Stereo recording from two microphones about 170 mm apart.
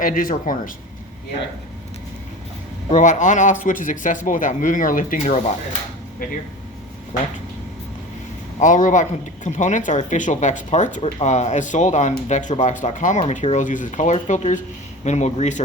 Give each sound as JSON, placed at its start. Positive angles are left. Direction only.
{"t": 0.0, "sound": "speech", "side_deg": 55}
{"t": 2.9, "sound": "speech", "side_deg": 45}
{"t": 8.6, "sound": "speech", "side_deg": 50}